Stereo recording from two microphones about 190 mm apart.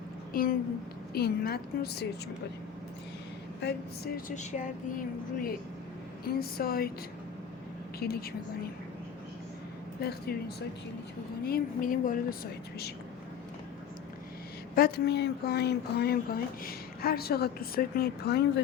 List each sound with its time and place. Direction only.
0.3 s a woman's voice: 50° left (ahead or behind)
3.6 s a woman's voice: 55° left (ahead or behind)
4.4 s speech: 40° left (ahead or behind)
7.9 s speech: 55° left (ahead or behind)
10.0 s a woman's voice: 55° left (ahead or behind)
11.4 s speech: 50° left (ahead or behind)
14.8 s a woman's voice: 55° left (ahead or behind)